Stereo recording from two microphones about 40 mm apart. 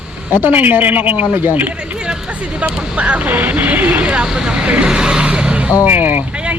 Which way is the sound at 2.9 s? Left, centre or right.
Right.